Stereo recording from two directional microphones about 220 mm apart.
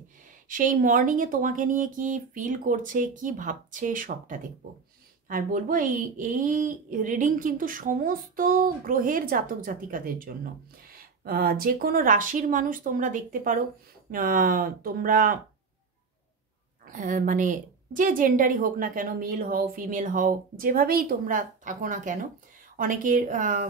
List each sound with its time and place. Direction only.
0.5 s speech: 35° right (ahead or behind)
16.8 s speech: 40° right (ahead or behind)